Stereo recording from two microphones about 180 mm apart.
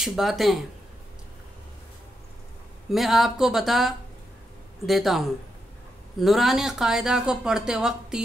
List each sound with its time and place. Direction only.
0.0 s speech: centre (ahead or behind)
2.9 s speech: centre (ahead or behind)